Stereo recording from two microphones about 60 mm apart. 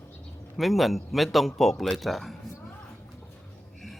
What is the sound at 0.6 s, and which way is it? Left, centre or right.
Speech, centre.